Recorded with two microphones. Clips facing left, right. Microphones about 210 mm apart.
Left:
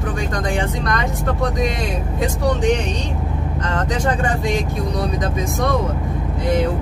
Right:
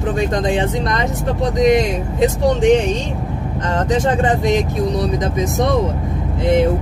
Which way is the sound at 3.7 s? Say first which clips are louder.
Right 5 dB; 25° right (ahead or behind).